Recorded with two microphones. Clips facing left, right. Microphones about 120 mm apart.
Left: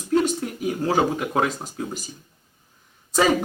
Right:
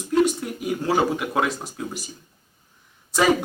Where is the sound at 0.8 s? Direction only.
35° left (ahead or behind).